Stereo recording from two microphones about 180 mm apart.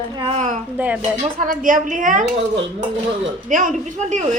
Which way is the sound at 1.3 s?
50° right (ahead or behind).